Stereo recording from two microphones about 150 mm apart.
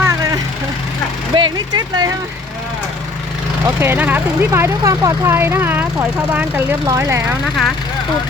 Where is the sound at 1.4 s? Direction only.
30° right (ahead or behind).